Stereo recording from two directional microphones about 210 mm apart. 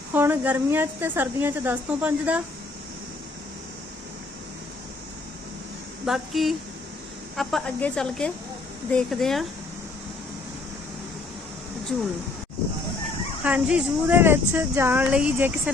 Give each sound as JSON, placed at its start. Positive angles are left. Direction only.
{"t": 0.1, "sound": "speech", "side_deg": -10}
{"t": 6.1, "sound": "a woman's voice", "side_deg": 0}
{"t": 13.4, "sound": "speech", "side_deg": -5}